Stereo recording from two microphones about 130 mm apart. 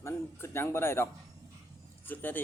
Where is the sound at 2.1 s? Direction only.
15° left (ahead or behind).